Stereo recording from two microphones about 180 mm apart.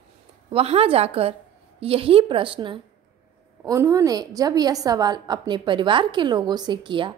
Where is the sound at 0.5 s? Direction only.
35° right (ahead or behind).